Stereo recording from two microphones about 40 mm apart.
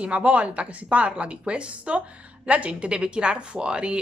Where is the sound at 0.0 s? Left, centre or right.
Right.